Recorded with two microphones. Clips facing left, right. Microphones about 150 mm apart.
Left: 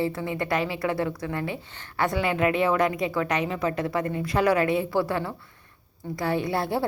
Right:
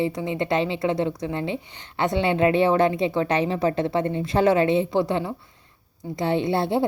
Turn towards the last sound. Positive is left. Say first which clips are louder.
# right 4 dB
turn(degrees=-25)  # may be behind; listen again after turning